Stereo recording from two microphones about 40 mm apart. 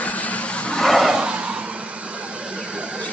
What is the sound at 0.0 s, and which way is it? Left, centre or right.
Vehicle, left.